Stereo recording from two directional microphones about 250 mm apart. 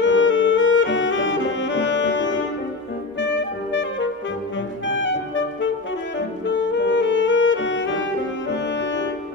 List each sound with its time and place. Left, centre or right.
0.0 s music: left
3.2 s saxophone: left
4.6 s music: left